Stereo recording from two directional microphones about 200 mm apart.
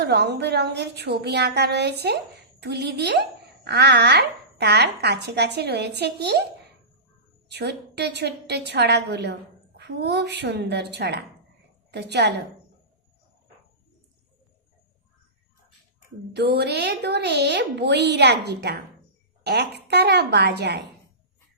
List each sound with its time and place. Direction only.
0.0 s a woman's voice: 55° right (ahead or behind)
7.4 s a woman's voice: 55° right (ahead or behind)
16.3 s a woman's voice: 55° right (ahead or behind)